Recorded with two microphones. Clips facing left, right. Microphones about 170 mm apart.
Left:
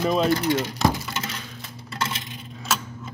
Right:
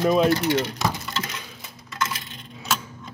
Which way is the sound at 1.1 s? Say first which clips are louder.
Right 1 dB; 20° left (ahead or behind).